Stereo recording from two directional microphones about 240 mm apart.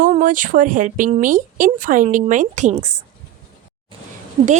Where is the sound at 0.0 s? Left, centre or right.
Right.